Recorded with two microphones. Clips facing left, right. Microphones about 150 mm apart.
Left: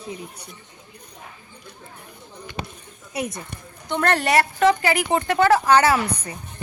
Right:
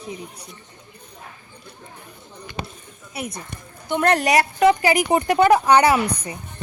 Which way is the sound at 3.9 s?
15° right (ahead or behind).